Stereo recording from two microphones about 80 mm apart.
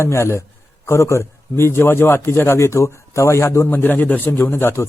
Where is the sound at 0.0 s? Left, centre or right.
Left.